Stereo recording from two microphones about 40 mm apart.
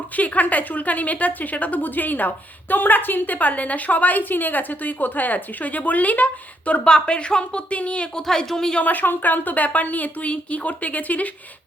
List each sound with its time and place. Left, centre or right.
0.2 s a woman's voice: left
6.8 s a woman's voice: centre
8.1 s a woman's voice: centre
8.8 s a woman's voice: left